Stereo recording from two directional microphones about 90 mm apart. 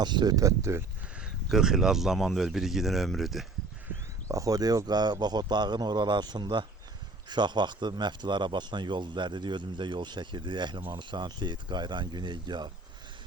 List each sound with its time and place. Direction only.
0.0 s speech: 55° right (ahead or behind); by 0.9 s 30° right (ahead or behind)
1.2 s speech: 5° right (ahead or behind)
4.3 s a man's voice: 40° right (ahead or behind); by 12.7 s 55° right (ahead or behind)